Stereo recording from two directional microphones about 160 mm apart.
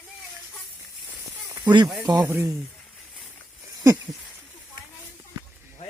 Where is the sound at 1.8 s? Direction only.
10° right (ahead or behind).